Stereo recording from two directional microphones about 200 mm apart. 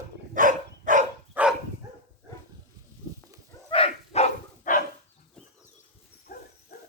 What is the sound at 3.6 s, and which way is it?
Dog, 30° left (ahead or behind).